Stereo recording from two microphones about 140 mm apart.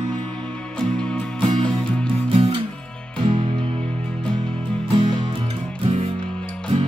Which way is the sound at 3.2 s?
40° right (ahead or behind).